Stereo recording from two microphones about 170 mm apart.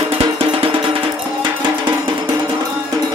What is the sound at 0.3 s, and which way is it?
Music, 30° right (ahead or behind).